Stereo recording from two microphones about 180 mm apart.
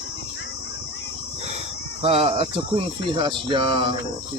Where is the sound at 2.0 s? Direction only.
30° right (ahead or behind).